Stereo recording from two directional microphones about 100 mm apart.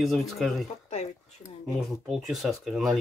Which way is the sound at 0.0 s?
Centre (ahead or behind).